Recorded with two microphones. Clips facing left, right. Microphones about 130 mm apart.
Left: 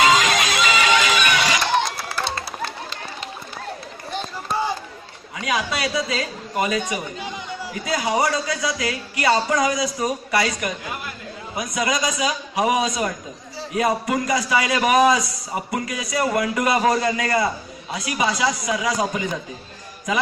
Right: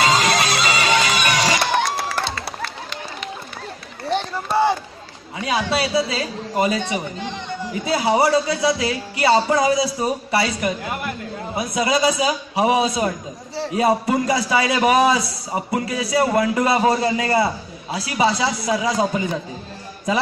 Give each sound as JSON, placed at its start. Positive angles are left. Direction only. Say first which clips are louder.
{"t": 0.0, "sound": "music", "louder": "even", "side_deg": -35}
{"t": 2.0, "sound": "run", "louder": "right 4 dB", "side_deg": -65}
{"t": 4.1, "sound": "run", "louder": "right 6 dB", "side_deg": -65}
{"t": 5.4, "sound": "a man's voice", "louder": "right 3 dB", "side_deg": -30}
{"t": 7.2, "sound": "chatter", "louder": "right 3 dB", "side_deg": 10}
{"t": 7.8, "sound": "a man's voice", "louder": "right 4 dB", "side_deg": -30}